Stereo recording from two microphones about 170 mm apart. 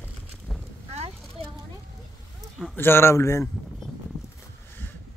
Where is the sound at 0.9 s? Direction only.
40° right (ahead or behind).